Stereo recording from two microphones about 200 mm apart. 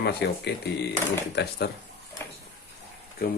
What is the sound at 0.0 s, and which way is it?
Speech, 55° left (ahead or behind).